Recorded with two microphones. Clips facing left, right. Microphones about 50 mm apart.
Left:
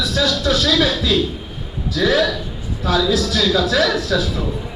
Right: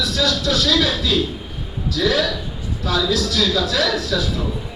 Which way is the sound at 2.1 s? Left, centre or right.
Centre.